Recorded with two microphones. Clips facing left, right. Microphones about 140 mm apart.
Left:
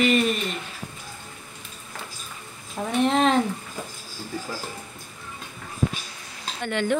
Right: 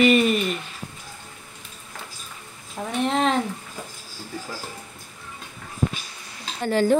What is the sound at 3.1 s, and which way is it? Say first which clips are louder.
Speech: left 1 dB; centre (ahead or behind).